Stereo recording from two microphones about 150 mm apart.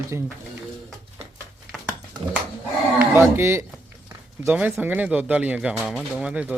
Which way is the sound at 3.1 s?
15° right (ahead or behind).